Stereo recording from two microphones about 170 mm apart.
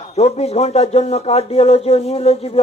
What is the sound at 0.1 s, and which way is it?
Speech, 40° left (ahead or behind).